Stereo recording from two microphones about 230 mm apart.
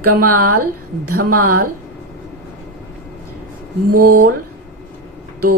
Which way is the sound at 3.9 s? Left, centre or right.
Right.